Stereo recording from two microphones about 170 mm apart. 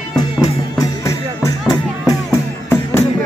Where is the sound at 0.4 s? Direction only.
20° left (ahead or behind).